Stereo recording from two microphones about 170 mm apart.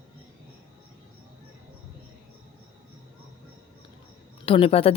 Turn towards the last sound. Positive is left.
turn(degrees=35)  # may be behind; listen again after turning